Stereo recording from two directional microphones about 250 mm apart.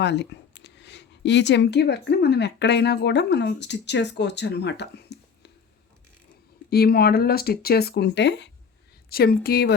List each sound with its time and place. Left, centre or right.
0.0 s speech: left
6.7 s speech: left